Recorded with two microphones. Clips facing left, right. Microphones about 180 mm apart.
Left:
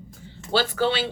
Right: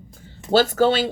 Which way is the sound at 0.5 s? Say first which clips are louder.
Right 6 dB; 45° right (ahead or behind).